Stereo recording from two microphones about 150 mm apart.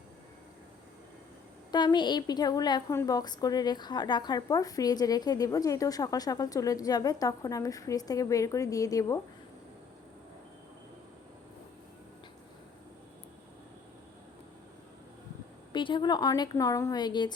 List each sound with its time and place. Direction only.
1.7 s speech: 30° left (ahead or behind)
15.7 s speech: 30° left (ahead or behind)